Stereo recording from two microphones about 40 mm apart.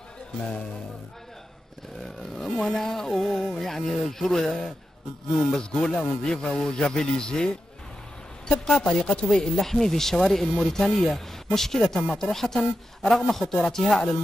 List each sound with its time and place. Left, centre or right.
2.3 s speech: centre
5.6 s a man's voice: left
8.8 s speech: left